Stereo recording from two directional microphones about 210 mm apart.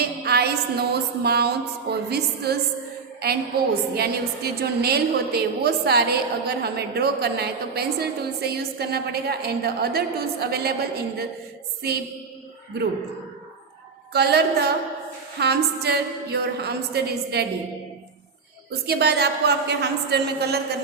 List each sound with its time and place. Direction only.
0.0 s a woman's voice: 50° right (ahead or behind)
14.1 s a woman's voice: 50° right (ahead or behind)
18.9 s a woman's voice: 50° right (ahead or behind)